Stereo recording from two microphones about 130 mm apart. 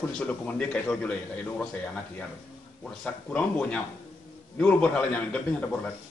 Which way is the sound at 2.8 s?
10° left (ahead or behind).